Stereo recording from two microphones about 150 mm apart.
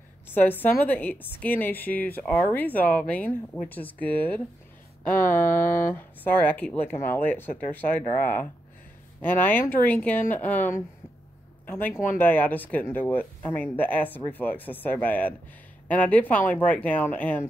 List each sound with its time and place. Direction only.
0.3 s speech: 10° left (ahead or behind)
9.2 s speech: 15° left (ahead or behind)